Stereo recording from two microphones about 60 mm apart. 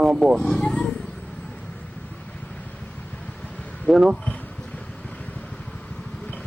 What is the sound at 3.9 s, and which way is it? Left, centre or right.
Speech, centre.